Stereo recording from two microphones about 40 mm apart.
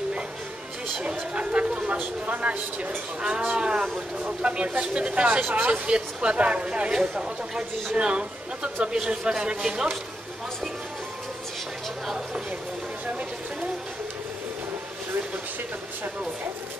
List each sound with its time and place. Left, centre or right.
1.3 s a sound: right
2.2 s speech: right
3.2 s speech: right